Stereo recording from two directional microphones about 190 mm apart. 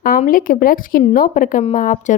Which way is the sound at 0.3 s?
45° left (ahead or behind).